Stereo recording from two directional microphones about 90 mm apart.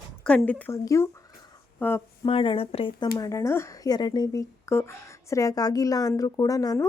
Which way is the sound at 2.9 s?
55° left (ahead or behind).